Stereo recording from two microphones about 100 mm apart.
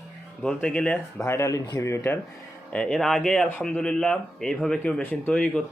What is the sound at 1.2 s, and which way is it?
Speech, 30° left (ahead or behind).